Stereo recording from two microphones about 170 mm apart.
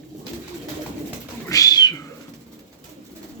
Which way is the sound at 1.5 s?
20° left (ahead or behind).